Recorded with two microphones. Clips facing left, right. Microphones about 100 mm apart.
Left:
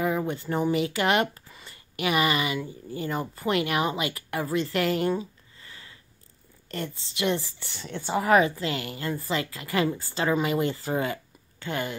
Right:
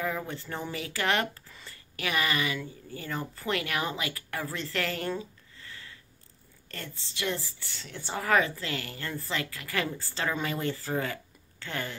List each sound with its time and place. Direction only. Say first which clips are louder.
0.3 s a woman's voice: left 10 dB; 20° left (ahead or behind)